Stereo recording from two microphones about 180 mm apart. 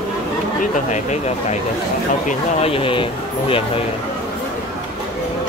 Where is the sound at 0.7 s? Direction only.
40° left (ahead or behind).